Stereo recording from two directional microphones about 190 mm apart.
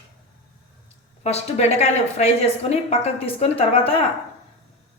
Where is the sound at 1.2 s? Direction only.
35° left (ahead or behind).